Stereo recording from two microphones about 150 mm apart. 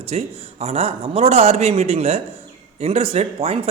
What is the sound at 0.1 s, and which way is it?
Speech, 45° right (ahead or behind).